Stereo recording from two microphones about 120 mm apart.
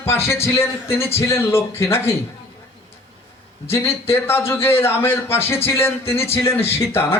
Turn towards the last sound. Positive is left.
turn(degrees=20)  # may be behind; listen again after turning